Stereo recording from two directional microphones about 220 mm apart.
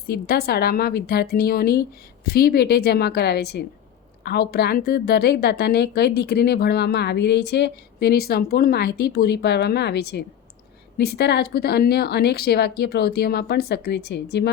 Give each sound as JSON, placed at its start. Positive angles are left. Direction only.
{"t": 0.1, "sound": "a woman's voice", "side_deg": 45}